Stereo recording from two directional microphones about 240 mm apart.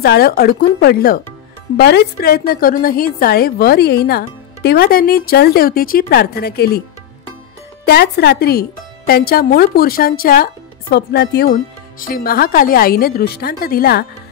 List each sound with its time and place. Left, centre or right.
0.0 s a woman's voice: left
7.8 s a woman's voice: left